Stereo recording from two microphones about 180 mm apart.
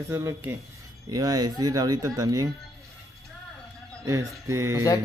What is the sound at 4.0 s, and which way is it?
Speech, 15° right (ahead or behind).